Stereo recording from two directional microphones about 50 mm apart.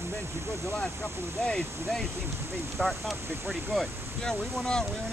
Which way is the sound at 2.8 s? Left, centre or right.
Centre.